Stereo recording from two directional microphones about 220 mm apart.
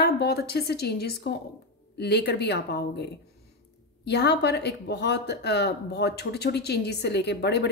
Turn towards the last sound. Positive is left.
turn(degrees=50)  # may be behind; listen again after turning